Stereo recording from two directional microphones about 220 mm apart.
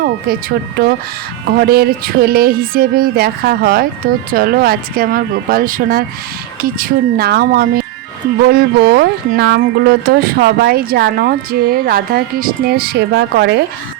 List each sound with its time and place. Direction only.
0.0 s speech: 40° right (ahead or behind)